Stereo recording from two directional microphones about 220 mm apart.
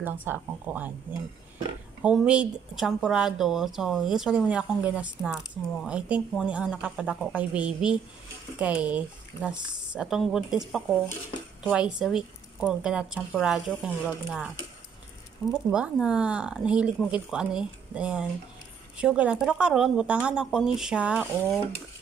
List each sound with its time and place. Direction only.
0.0 s speech: 10° right (ahead or behind)
2.0 s speech: 5° right (ahead or behind)
11.7 s speech: 5° right (ahead or behind)
15.5 s speech: 5° right (ahead or behind)